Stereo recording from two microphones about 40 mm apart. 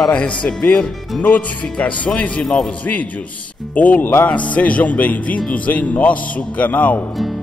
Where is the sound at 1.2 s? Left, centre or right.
Left.